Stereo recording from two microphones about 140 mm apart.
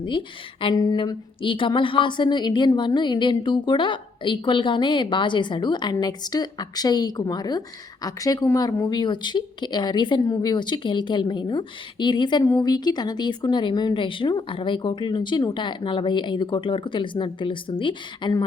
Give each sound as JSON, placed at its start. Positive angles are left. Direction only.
{"t": 0.0, "sound": "speech", "side_deg": 35}